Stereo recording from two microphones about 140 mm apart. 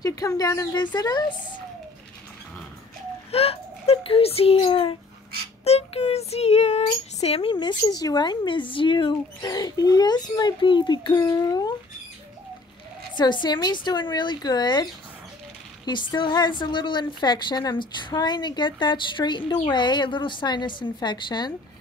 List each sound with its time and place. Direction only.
0.0 s speech: 25° left (ahead or behind)
3.3 s a child's voice: 45° left (ahead or behind)
5.6 s a child's voice: 50° left (ahead or behind)
7.5 s speech: 30° left (ahead or behind)
13.1 s a woman's voice: 35° left (ahead or behind)